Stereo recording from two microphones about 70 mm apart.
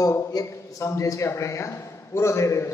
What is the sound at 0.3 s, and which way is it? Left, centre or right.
A man's voice, left.